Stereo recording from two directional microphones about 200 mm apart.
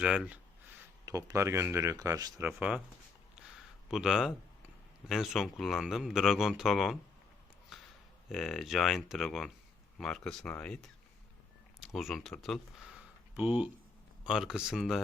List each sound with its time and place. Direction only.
0.0 s speech: 5° right (ahead or behind)
1.0 s speech: 15° right (ahead or behind)
2.5 s speech: 5° right (ahead or behind)
3.3 s a sound: centre (ahead or behind)
5.0 s speech: centre (ahead or behind)
8.3 s speech: centre (ahead or behind)
11.9 s speech: centre (ahead or behind)